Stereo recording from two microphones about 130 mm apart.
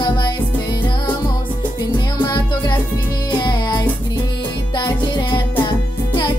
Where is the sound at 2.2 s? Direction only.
35° left (ahead or behind).